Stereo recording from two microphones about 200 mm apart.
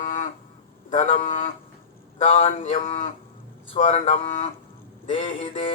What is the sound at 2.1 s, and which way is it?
Synthetic singing, 30° left (ahead or behind).